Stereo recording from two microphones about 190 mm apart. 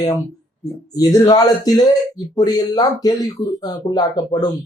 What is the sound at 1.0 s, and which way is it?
Speech, 20° left (ahead or behind).